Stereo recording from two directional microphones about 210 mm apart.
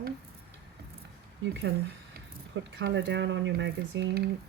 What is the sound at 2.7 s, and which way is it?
Speech, 60° right (ahead or behind).